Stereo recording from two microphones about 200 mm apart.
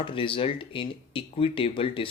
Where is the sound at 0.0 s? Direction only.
25° left (ahead or behind).